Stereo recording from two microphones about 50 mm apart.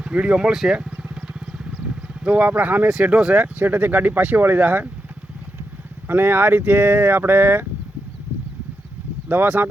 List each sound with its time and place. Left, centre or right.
0.0 s speech: right
0.5 s speech: centre
1.1 s vehicle: right
3.0 s speech: right
3.3 s speech: right
6.1 s speech: right
9.3 s speech: right